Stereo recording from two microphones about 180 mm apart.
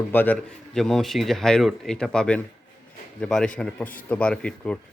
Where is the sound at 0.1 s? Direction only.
10° left (ahead or behind).